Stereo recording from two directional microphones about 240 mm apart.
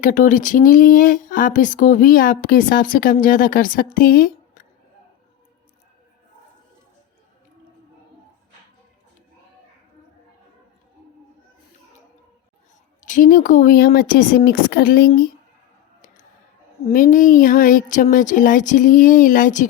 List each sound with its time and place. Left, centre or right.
0.0 s speech: left
13.0 s speech: left
16.8 s speech: left